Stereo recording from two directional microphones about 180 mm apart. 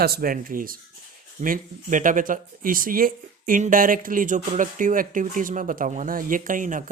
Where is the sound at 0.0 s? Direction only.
55° right (ahead or behind).